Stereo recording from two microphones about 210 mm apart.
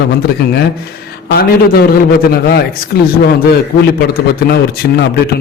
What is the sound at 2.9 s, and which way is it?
Speech, 50° left (ahead or behind).